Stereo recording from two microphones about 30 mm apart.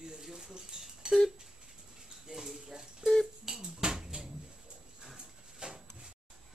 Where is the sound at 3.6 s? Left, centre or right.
Right.